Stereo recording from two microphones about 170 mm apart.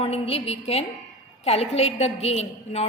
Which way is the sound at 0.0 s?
35° left (ahead or behind).